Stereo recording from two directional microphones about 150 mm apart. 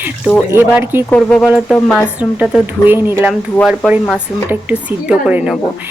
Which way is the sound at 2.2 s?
10° right (ahead or behind).